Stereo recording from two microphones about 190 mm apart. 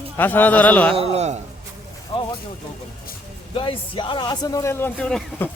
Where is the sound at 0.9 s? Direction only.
35° right (ahead or behind).